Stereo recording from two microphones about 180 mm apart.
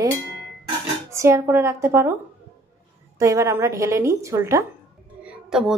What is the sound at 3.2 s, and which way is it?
A woman's voice, 15° right (ahead or behind).